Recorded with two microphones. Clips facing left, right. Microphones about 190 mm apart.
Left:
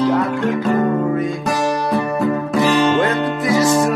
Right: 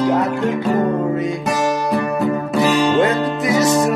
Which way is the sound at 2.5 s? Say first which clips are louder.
Even; centre (ahead or behind).